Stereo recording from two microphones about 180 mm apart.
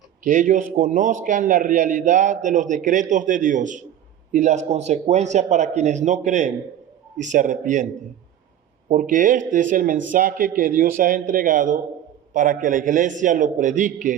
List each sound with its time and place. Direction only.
0.3 s a man's voice: 45° right (ahead or behind)
8.9 s a man's voice: 45° right (ahead or behind)